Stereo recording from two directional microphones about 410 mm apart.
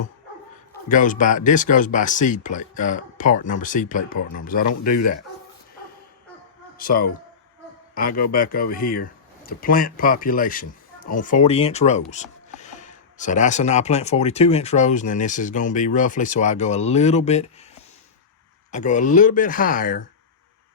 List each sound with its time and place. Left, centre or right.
0.9 s speech: centre
6.7 s speech: left
18.7 s speech: centre